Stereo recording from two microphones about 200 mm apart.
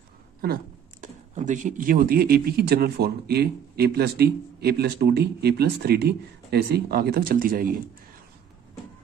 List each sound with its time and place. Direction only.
1.0 s speech: 35° right (ahead or behind)